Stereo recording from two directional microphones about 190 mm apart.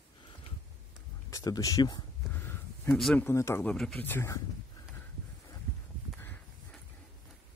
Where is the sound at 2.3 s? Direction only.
10° left (ahead or behind).